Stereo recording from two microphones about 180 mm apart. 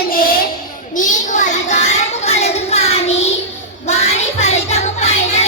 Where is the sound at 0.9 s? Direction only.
45° left (ahead or behind).